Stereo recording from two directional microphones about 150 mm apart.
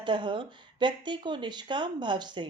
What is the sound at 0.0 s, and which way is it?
Speech, 30° right (ahead or behind).